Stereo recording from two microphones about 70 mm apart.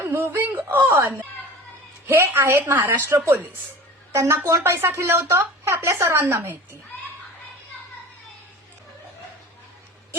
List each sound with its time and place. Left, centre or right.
0.0 s speech: right
4.1 s a woman's voice: right